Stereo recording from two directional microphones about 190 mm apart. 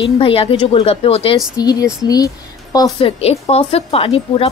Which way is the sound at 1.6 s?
20° left (ahead or behind).